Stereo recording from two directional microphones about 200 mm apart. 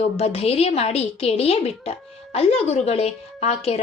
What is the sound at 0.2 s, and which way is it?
A woman's voice, 30° left (ahead or behind).